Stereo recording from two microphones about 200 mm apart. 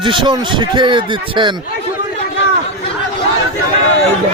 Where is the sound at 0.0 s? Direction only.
25° right (ahead or behind).